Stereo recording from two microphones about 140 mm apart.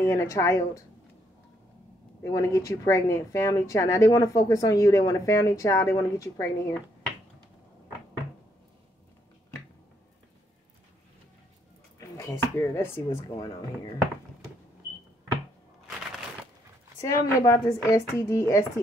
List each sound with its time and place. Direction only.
0.0 s speech: 20° left (ahead or behind)
2.2 s speech: 20° left (ahead or behind)
12.0 s speech: 20° left (ahead or behind)
17.0 s speech: 25° left (ahead or behind)